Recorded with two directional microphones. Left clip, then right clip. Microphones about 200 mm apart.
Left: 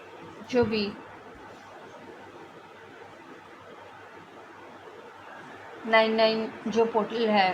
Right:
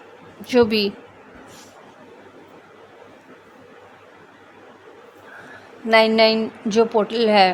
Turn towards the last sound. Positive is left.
turn(degrees=-60)  # may be behind; listen again after turning